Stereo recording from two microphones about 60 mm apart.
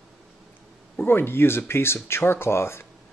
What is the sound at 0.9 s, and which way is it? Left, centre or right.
Speech, left.